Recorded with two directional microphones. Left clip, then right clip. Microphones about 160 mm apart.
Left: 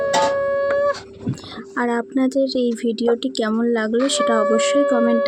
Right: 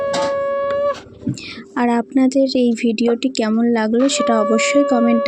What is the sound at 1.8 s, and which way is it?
Speech, 30° right (ahead or behind).